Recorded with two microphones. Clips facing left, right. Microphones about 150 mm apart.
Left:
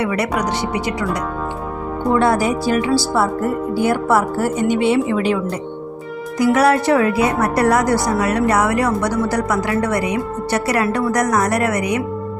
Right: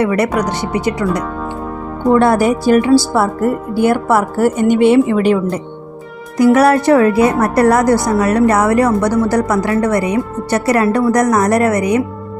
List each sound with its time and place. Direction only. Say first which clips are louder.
0.0 s a woman's voice: right 6 dB; 45° right (ahead or behind)
2.1 s a woman's voice: right 4 dB; 55° right (ahead or behind)
6.4 s a woman's voice: right 5 dB; 50° right (ahead or behind)